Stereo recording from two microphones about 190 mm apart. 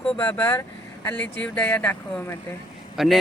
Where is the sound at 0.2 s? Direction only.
10° left (ahead or behind).